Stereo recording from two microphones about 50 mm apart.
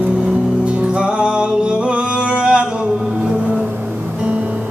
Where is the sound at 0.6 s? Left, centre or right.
Right.